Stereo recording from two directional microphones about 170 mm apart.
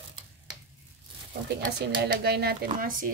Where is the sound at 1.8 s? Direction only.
70° right (ahead or behind).